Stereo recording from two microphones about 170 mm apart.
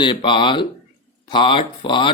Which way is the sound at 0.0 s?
30° left (ahead or behind).